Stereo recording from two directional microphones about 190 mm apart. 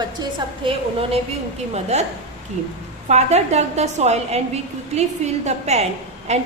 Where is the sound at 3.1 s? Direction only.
35° right (ahead or behind).